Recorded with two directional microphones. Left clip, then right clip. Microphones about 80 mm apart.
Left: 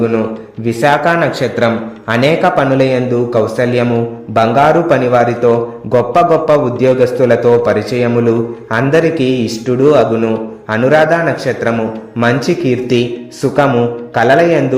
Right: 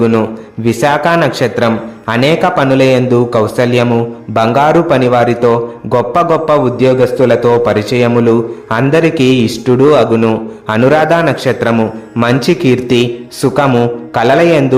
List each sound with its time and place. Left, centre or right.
0.0 s a man's voice: right